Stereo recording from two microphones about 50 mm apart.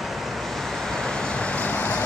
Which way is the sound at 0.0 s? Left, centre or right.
Centre.